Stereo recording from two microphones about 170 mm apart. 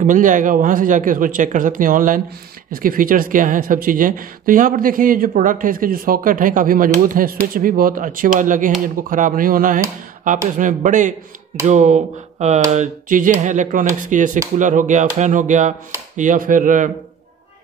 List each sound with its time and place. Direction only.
0.0 s a man's voice: 50° right (ahead or behind)